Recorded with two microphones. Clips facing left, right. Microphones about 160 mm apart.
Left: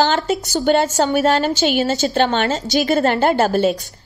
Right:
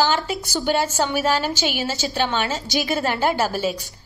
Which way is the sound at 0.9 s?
40° left (ahead or behind).